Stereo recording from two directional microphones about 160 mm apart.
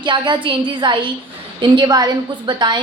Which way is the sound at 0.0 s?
30° right (ahead or behind).